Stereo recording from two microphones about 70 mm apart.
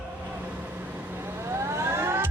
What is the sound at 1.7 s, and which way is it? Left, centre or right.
Vehicle, right.